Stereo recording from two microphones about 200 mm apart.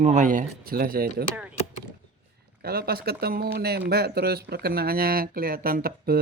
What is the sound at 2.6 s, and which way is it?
Speech, 50° right (ahead or behind).